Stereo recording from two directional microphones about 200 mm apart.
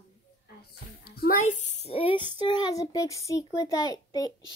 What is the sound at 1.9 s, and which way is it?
Female singing, 25° left (ahead or behind).